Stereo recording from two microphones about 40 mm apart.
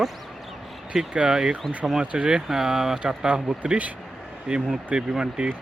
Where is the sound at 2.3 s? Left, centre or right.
Centre.